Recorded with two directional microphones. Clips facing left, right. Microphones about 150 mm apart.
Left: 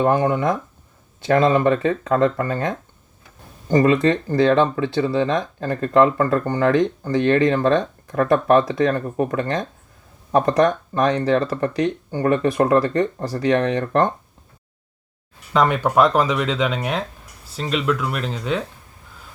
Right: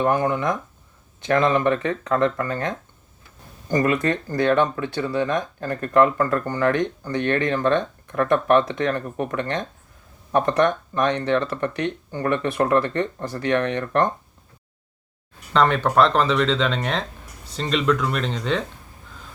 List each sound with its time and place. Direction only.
0.0 s speech: 30° left (ahead or behind)
15.5 s speech: 10° left (ahead or behind)